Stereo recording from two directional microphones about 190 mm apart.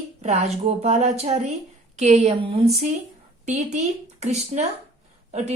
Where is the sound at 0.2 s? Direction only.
35° right (ahead or behind).